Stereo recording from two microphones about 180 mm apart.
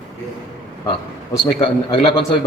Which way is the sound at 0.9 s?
30° left (ahead or behind).